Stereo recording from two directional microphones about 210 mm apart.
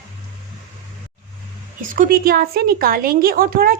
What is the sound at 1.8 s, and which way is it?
A woman's voice, 40° right (ahead or behind).